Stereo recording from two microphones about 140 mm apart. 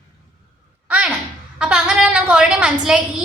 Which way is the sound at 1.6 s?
5° right (ahead or behind).